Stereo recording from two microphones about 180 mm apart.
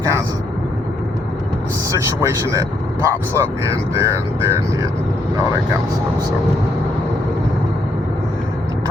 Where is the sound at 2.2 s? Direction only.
15° right (ahead or behind).